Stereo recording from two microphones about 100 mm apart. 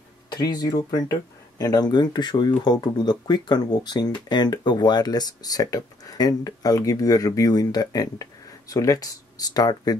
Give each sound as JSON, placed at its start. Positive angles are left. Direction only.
{"t": 0.3, "sound": "speech", "side_deg": 45}